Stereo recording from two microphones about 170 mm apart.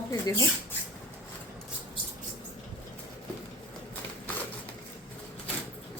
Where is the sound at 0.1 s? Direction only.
20° left (ahead or behind).